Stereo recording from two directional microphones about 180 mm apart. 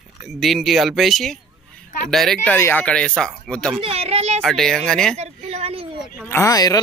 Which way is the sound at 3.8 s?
35° right (ahead or behind).